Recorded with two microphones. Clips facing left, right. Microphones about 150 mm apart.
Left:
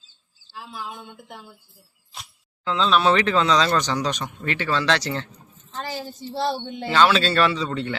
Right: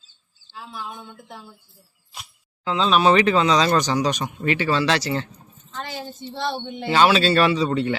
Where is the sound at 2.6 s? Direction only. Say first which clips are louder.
Right 2 dB; 10° right (ahead or behind).